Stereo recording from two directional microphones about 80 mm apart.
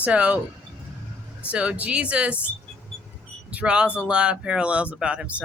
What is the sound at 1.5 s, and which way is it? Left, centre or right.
Speech, centre.